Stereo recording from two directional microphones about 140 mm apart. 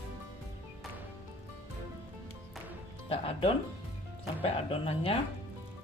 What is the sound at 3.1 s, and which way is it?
Music, 40° left (ahead or behind).